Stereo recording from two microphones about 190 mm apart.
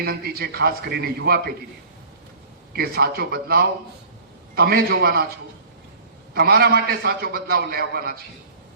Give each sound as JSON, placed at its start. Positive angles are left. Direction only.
{"t": 0.0, "sound": "a man's voice", "side_deg": -55}
{"t": 2.7, "sound": "a man's voice", "side_deg": -55}
{"t": 6.3, "sound": "a man's voice", "side_deg": -55}